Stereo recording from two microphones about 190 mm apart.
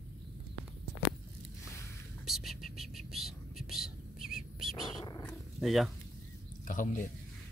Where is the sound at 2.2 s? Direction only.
Centre (ahead or behind).